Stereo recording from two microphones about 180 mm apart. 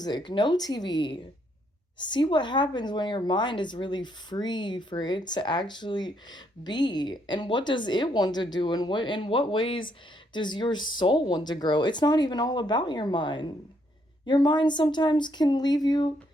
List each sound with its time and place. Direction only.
0.3 s speech: 25° left (ahead or behind)